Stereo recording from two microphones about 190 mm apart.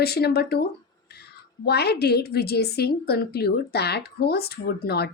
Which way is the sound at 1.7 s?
60° left (ahead or behind).